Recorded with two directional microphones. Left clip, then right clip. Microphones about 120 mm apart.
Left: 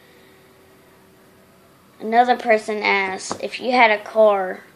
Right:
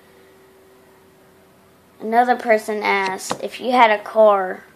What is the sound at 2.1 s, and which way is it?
Speech, 15° right (ahead or behind).